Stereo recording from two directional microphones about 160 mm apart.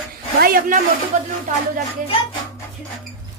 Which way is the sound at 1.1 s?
50° right (ahead or behind).